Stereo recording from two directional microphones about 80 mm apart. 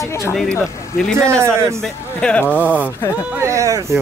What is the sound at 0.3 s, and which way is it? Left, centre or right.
Speech, centre.